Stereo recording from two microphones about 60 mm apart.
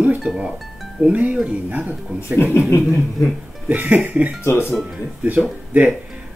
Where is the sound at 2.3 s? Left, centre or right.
Left.